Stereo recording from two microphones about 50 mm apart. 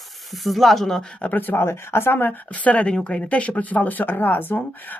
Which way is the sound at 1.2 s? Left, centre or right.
Left.